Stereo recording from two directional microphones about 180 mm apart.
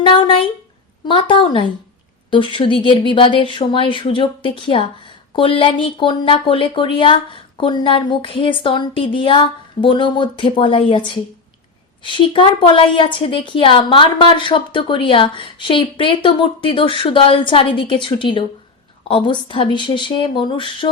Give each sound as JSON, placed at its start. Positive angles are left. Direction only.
{"t": 0.0, "sound": "a woman's voice", "side_deg": 30}